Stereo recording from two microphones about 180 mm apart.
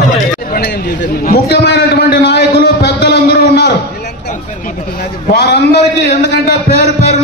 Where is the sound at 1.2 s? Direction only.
65° left (ahead or behind).